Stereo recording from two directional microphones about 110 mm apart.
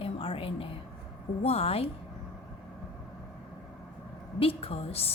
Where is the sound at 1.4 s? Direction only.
70° left (ahead or behind).